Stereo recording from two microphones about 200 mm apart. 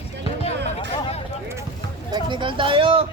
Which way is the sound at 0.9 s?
30° left (ahead or behind).